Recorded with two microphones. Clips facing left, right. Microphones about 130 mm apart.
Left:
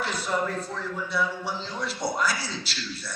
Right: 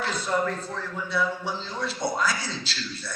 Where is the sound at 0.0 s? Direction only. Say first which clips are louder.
Right 1 dB; 10° left (ahead or behind).